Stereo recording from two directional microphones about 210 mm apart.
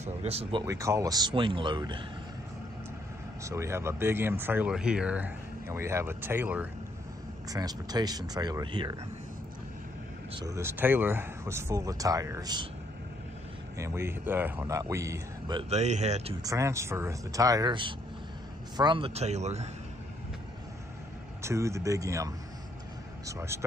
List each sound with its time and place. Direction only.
0.0 s speech: 30° right (ahead or behind)
3.4 s speech: 15° right (ahead or behind)
10.3 s speech: 15° right (ahead or behind)
13.7 s speech: 15° right (ahead or behind)
15.7 s a man's voice: 30° right (ahead or behind)
16.4 s a man's voice: 15° right (ahead or behind); by 19.7 s 30° right (ahead or behind)
21.4 s speech: 15° right (ahead or behind)